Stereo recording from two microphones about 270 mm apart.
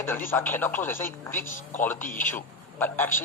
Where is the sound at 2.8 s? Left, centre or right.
Centre.